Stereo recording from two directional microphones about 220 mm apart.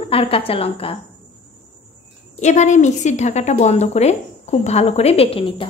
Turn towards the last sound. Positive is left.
turn(degrees=25)  # may be behind; listen again after turning